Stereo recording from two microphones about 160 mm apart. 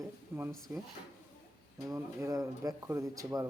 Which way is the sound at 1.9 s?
20° right (ahead or behind).